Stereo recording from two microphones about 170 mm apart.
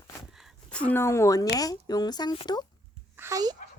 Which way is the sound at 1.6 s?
20° left (ahead or behind).